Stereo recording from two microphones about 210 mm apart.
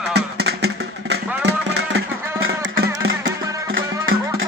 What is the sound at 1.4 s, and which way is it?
Music, 55° right (ahead or behind).